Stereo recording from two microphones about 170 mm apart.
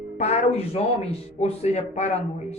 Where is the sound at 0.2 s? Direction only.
40° left (ahead or behind).